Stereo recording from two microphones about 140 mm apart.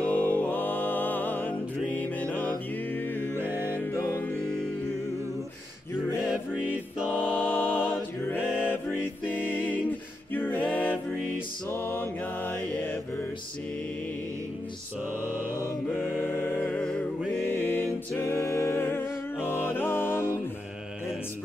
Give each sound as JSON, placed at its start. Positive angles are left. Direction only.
{"t": 0.0, "sound": "music", "side_deg": 10}
{"t": 3.3, "sound": "music", "side_deg": -15}
{"t": 7.1, "sound": "music", "side_deg": 15}
{"t": 11.7, "sound": "mantra", "side_deg": 15}
{"t": 15.9, "sound": "music", "side_deg": 10}